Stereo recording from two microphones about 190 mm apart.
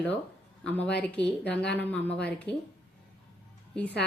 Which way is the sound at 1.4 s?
60° left (ahead or behind).